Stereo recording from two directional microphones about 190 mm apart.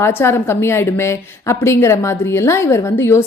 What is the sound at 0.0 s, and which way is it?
A woman's voice, 10° left (ahead or behind).